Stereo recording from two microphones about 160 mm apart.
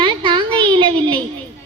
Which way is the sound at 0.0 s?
30° right (ahead or behind).